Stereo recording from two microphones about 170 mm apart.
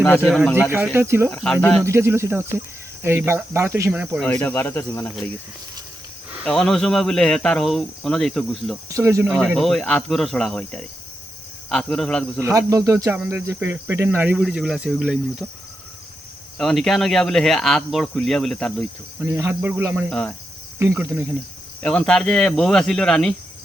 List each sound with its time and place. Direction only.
0.2 s speech: centre (ahead or behind)
0.7 s speech: 10° right (ahead or behind)
1.3 s speech: 5° left (ahead or behind)
1.8 s speech: 15° right (ahead or behind)
4.2 s speech: 10° left (ahead or behind)
6.4 s speech: centre (ahead or behind)
8.9 s speech: 15° right (ahead or behind)
9.2 s speech: 5° right (ahead or behind)
12.4 s speech: 20° right (ahead or behind)
16.6 s speech: centre (ahead or behind)
19.2 s speech: 15° right (ahead or behind)
20.1 s speech: 5° left (ahead or behind)
20.7 s speech: 15° right (ahead or behind)
21.8 s speech: 5° left (ahead or behind)